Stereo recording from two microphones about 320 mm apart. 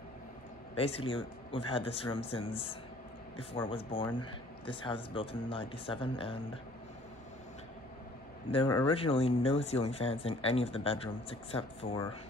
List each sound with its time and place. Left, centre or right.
0.7 s speech: centre
8.5 s speech: centre